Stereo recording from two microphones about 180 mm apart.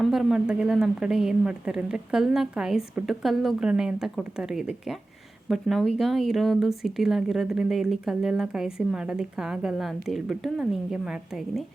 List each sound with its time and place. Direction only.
0.0 s speech: centre (ahead or behind)